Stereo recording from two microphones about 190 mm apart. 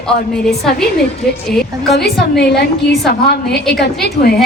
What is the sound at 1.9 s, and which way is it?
A woman's voice, 60° left (ahead or behind).